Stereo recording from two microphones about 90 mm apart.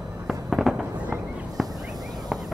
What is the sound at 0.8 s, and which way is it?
Fireworks, 15° right (ahead or behind).